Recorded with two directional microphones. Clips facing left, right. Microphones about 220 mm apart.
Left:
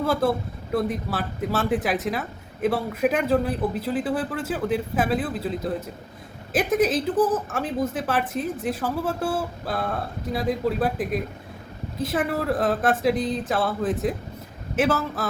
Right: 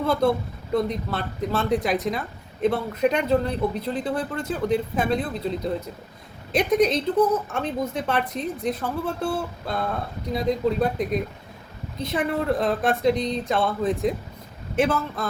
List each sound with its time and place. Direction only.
0.0 s a man's voice: 5° left (ahead or behind)